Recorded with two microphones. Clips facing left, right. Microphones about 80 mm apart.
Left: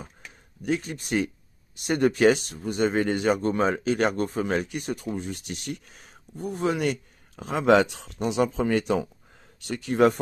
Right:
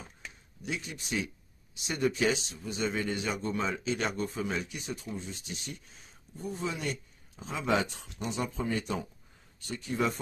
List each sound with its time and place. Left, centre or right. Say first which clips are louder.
0.6 s speech: left 10 dB; left